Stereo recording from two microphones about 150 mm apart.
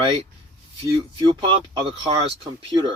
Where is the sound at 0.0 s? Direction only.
35° right (ahead or behind).